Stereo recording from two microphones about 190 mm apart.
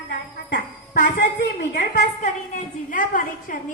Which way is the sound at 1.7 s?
40° left (ahead or behind).